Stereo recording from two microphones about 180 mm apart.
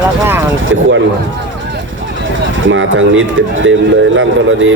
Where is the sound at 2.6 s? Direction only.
90° right.